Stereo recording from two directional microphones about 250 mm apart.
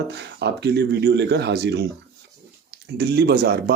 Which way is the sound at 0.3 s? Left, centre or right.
Right.